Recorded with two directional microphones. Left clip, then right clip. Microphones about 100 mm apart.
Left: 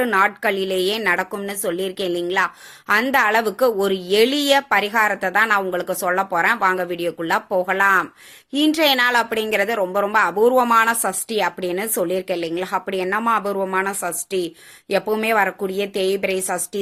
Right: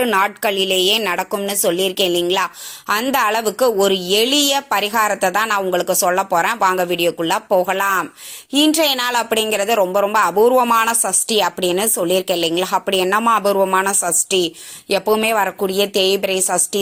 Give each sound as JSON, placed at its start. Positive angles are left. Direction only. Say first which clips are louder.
{"t": 0.2, "sound": "a woman's voice", "louder": "right 1 dB", "side_deg": -20}
{"t": 1.3, "sound": "a woman's voice", "louder": "right 6 dB", "side_deg": -5}